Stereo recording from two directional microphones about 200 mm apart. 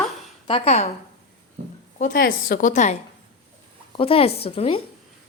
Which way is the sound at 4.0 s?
30° left (ahead or behind).